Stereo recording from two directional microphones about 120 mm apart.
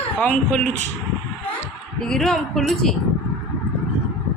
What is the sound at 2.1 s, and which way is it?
Speech, 5° left (ahead or behind).